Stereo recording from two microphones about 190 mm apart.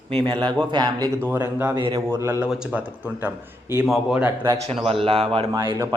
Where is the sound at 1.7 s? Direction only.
25° right (ahead or behind).